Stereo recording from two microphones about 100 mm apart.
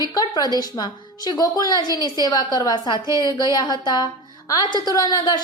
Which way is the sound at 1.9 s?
35° right (ahead or behind).